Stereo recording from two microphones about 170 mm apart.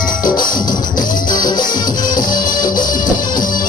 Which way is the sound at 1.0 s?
50° left (ahead or behind).